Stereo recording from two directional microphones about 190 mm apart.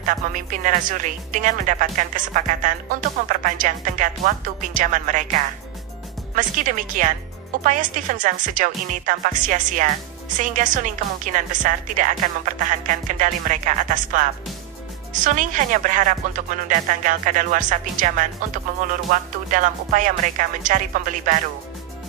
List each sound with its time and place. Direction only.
0.0 s speech: 45° right (ahead or behind)
6.3 s speech: 45° right (ahead or behind)
15.2 s speech: 45° right (ahead or behind)